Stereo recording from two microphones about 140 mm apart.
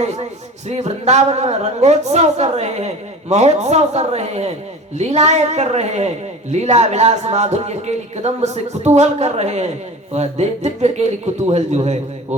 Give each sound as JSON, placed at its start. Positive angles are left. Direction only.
{"t": 0.7, "sound": "a woman's voice", "side_deg": -55}